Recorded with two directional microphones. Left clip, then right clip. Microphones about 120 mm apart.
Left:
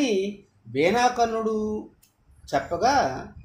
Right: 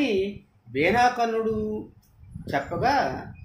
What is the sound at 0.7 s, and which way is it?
Speech, 80° left.